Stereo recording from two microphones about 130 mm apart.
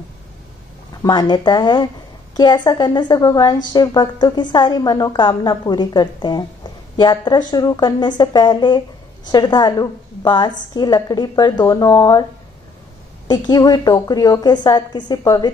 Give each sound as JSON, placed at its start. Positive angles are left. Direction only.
{"t": 1.0, "sound": "a woman's voice", "side_deg": 35}
{"t": 13.3, "sound": "a woman's voice", "side_deg": 30}